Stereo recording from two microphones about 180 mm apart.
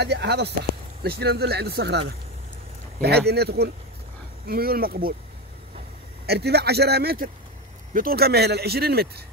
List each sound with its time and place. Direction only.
0.0 s speech: 70° right (ahead or behind)
6.2 s speech: 65° right (ahead or behind)